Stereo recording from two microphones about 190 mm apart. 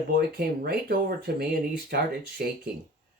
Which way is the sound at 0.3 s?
55° right (ahead or behind).